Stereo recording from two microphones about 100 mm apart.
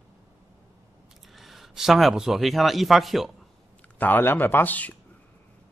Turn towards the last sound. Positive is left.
turn(degrees=15)  # may be behind; listen again after turning